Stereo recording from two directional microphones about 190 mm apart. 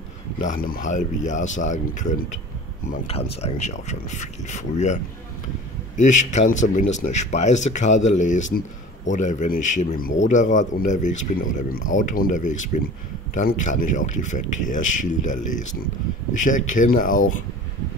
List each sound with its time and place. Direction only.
0.4 s speech: 45° left (ahead or behind)